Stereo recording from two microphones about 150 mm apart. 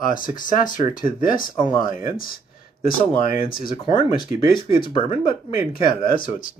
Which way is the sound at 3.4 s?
75° left (ahead or behind).